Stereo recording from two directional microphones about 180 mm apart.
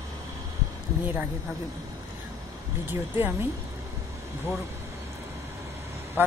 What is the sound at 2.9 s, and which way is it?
Speech, 10° right (ahead or behind).